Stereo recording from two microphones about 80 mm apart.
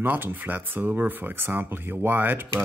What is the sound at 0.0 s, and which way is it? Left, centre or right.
Speech, right.